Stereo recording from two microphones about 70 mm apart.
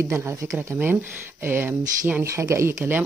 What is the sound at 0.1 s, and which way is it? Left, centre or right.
Speech, right.